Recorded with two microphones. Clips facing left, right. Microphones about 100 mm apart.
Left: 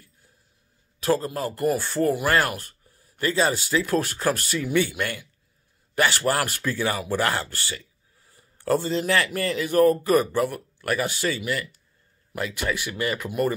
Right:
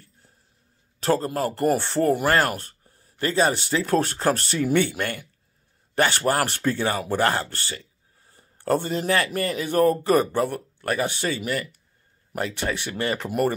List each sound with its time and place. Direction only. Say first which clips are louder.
0.9 s a man's voice: right 1 dB; 40° right (ahead or behind)
1.5 s speech: right 1 dB; 30° right (ahead or behind)
2.0 s speech: right 2 dB; 45° right (ahead or behind)
2.6 s a sound: right 1 dB; 35° right (ahead or behind)
3.4 s speech: even; 25° right (ahead or behind); by 5.3 s 45° right (ahead or behind)
5.9 s speech: right 1 dB; 30° right (ahead or behind)
7.5 s speech: even; 45° right (ahead or behind)
8.2 s a sound: right 1 dB; 30° right (ahead or behind)
9.0 s speech: right 1 dB; 35° right (ahead or behind)
11.4 s speech: right 1 dB; 40° right (ahead or behind)
12.7 s speech: right 1 dB; 30° right (ahead or behind)